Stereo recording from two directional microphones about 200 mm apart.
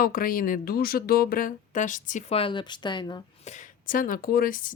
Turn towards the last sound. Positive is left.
turn(degrees=45)  # may be behind; listen again after turning